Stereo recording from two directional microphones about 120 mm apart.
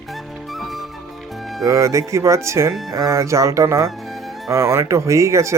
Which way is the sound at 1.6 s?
25° right (ahead or behind).